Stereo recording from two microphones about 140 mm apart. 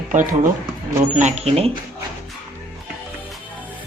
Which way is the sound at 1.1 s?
55° right (ahead or behind).